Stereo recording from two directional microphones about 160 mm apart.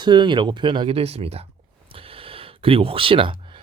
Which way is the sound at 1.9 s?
35° right (ahead or behind).